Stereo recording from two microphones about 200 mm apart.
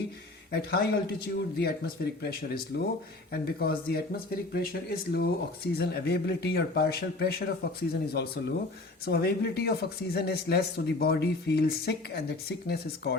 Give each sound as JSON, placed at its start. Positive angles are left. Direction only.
{"t": 0.5, "sound": "speech", "side_deg": 55}
{"t": 3.3, "sound": "speech", "side_deg": 50}